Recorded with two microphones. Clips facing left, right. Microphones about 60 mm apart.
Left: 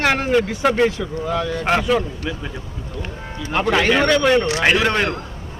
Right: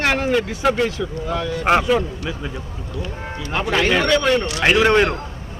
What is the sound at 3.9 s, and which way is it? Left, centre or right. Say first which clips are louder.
Speech: left 2 dB; centre.